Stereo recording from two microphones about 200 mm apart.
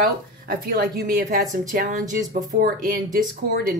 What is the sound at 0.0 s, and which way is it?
Speech, 45° right (ahead or behind).